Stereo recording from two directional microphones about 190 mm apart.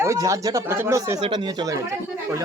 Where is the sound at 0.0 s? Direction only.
15° right (ahead or behind).